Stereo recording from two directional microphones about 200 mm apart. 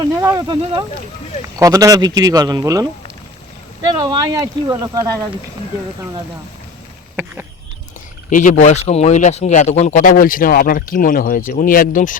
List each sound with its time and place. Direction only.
0.2 s speech: 15° right (ahead or behind)
4.0 s speech: 20° right (ahead or behind)
8.3 s speech: 40° left (ahead or behind)